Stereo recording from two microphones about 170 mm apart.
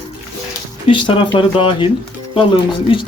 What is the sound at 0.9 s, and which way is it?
Speech, 30° left (ahead or behind).